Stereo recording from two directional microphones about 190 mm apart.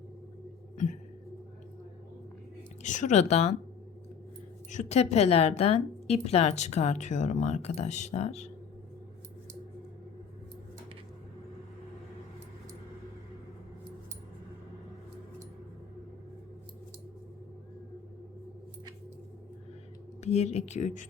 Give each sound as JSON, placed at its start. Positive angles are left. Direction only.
{"t": 2.8, "sound": "a woman's voice", "side_deg": 40}
{"t": 4.7, "sound": "a woman's voice", "side_deg": 40}
{"t": 20.2, "sound": "a woman's voice", "side_deg": 35}